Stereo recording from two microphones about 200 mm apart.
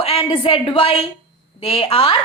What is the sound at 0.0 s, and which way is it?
A woman's voice, 30° left (ahead or behind).